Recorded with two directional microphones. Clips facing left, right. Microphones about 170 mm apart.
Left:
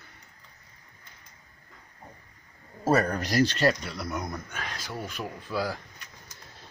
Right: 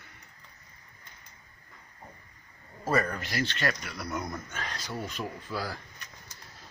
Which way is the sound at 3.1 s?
40° left (ahead or behind).